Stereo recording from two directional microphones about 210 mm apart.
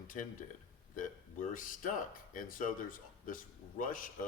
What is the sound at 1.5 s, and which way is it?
Speech, 40° left (ahead or behind).